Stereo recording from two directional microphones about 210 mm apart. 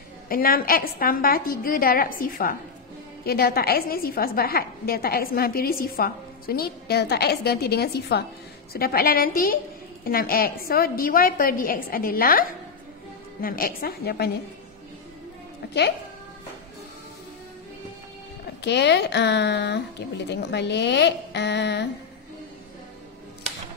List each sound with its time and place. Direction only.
0.3 s a woman's voice: 45° left (ahead or behind)
15.6 s speech: 50° left (ahead or behind)
18.6 s a woman's voice: 55° left (ahead or behind)